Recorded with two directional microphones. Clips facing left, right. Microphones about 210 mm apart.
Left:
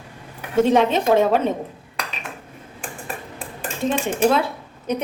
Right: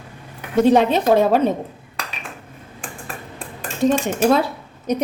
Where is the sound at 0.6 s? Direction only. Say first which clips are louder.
Right 2 dB; 35° right (ahead or behind).